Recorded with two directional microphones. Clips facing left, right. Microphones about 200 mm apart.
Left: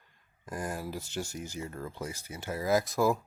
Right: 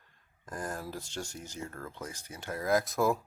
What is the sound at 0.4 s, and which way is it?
Speech, 10° left (ahead or behind).